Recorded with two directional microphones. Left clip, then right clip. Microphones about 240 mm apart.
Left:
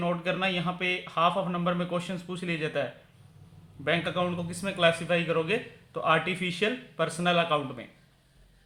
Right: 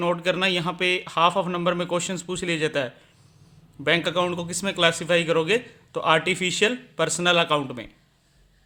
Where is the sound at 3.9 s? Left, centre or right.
Right.